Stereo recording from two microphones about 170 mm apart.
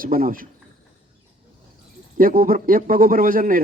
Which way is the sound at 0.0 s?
55° right (ahead or behind).